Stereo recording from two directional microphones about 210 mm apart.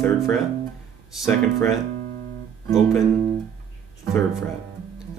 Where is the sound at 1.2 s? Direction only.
Centre (ahead or behind).